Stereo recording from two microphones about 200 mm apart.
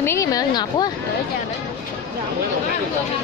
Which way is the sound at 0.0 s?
15° left (ahead or behind).